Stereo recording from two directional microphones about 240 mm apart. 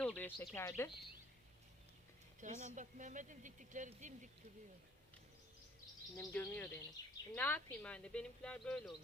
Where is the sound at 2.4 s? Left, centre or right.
Right.